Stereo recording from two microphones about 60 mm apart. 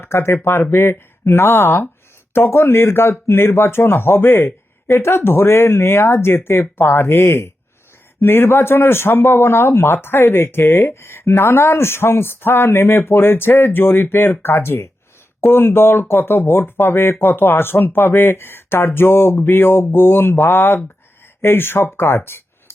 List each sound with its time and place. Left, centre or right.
0.0 s speech: left